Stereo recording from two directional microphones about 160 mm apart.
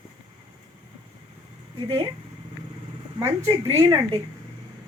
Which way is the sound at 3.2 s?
20° right (ahead or behind).